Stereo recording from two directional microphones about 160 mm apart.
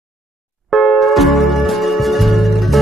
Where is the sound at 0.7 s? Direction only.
Centre (ahead or behind).